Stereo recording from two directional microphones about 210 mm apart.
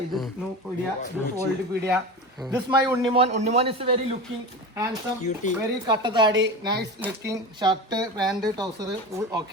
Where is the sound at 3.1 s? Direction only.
30° right (ahead or behind).